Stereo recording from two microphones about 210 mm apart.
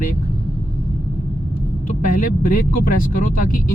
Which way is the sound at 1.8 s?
40° left (ahead or behind).